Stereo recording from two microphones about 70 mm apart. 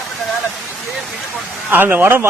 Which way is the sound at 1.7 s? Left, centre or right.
Right.